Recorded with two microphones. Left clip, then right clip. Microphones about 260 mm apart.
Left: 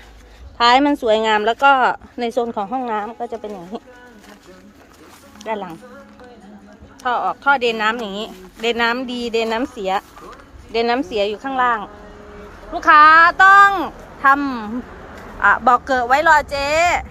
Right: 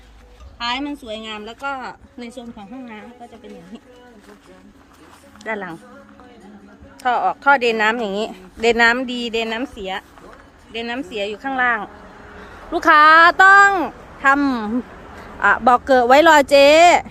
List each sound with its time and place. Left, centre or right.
0.6 s a woman's voice: centre
7.0 s speech: centre
12.7 s a woman's voice: right